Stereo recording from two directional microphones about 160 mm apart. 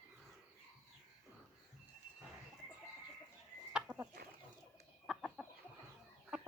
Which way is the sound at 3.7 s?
10° right (ahead or behind).